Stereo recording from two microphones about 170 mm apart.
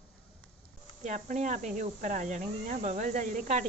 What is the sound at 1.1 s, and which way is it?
Speech, 45° right (ahead or behind).